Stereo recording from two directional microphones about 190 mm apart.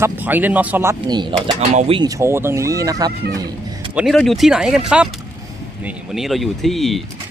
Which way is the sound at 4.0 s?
Centre (ahead or behind).